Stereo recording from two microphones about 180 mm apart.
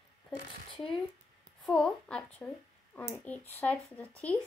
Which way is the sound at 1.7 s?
5° left (ahead or behind).